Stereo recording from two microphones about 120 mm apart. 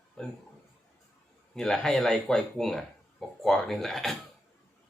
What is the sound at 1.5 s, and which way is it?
Speech, 5° left (ahead or behind).